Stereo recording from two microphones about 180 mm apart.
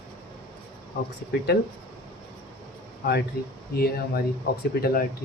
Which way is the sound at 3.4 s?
55° left (ahead or behind).